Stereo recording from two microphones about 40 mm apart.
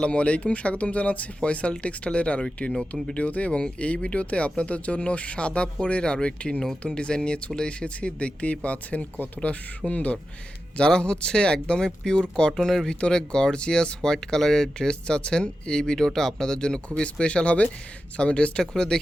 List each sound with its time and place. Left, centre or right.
0.0 s speech: left
12.5 s speech: centre
12.9 s speech: left
18.6 s speech: centre